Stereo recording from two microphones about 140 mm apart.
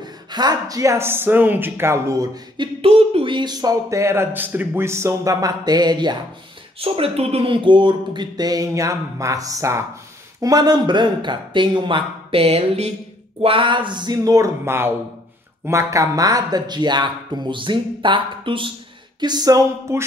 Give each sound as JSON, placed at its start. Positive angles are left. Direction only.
{"t": 0.0, "sound": "speech", "side_deg": -30}
{"t": 2.5, "sound": "speech", "side_deg": -40}
{"t": 6.8, "sound": "speech", "side_deg": -45}